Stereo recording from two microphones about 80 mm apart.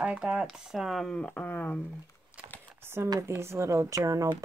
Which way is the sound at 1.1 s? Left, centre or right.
Centre.